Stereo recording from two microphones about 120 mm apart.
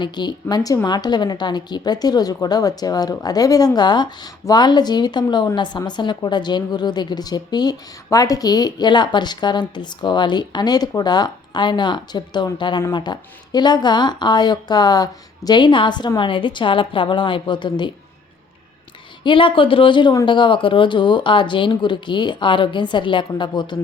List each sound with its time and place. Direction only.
0.0 s a woman's voice: 35° left (ahead or behind)
19.2 s speech: 45° left (ahead or behind)